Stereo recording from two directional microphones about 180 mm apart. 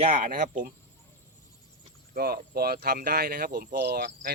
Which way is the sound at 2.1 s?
60° right (ahead or behind).